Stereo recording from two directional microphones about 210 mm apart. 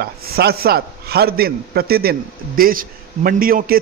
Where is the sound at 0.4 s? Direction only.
50° right (ahead or behind).